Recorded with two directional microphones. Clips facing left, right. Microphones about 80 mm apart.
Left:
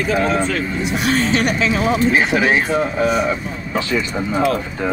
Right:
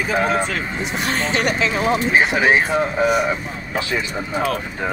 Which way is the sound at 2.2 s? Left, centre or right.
Centre.